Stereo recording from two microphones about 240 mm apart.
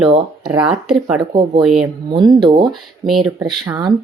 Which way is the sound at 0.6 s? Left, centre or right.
Centre.